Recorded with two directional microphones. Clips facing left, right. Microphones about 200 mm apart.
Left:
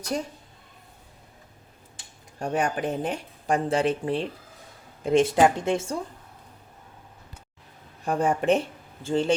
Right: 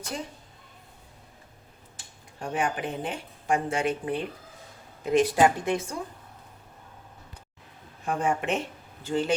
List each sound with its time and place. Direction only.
2.4 s speech: 40° left (ahead or behind)
8.0 s speech: 35° left (ahead or behind)